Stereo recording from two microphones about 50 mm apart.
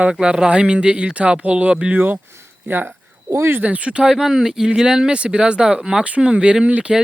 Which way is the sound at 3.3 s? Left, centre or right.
Right.